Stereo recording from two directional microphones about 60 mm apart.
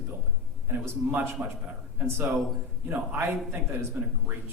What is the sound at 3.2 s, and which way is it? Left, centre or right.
Speech, right.